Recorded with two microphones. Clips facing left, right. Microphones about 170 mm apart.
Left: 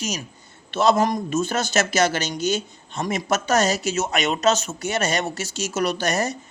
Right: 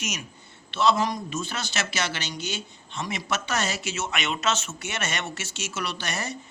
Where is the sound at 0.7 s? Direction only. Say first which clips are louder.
Left 5 dB; 45° left (ahead or behind).